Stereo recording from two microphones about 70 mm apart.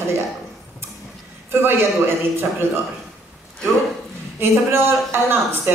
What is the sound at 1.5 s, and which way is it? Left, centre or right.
Speech, right.